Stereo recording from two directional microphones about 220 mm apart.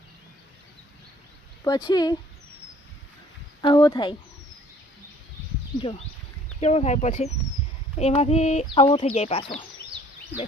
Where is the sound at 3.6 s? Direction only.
20° left (ahead or behind).